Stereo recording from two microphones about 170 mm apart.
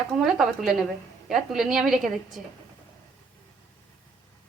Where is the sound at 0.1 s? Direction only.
Centre (ahead or behind).